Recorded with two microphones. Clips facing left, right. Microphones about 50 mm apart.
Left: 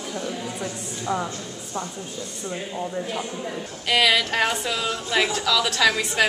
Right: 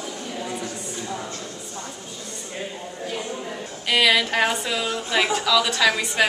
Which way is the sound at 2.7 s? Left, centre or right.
Centre.